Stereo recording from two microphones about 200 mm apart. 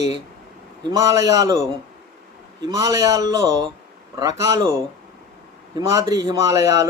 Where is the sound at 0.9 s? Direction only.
15° right (ahead or behind).